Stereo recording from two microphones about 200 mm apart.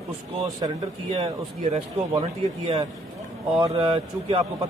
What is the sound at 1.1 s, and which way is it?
A man's voice, 30° right (ahead or behind).